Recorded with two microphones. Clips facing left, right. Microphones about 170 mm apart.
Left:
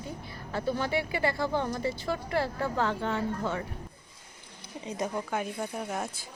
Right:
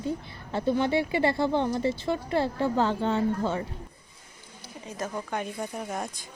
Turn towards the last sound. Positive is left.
turn(degrees=0)  # may be behind; listen again after turning